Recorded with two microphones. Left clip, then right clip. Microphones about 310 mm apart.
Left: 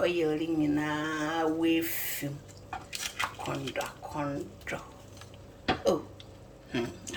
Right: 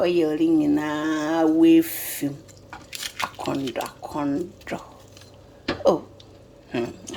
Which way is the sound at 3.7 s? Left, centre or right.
Right.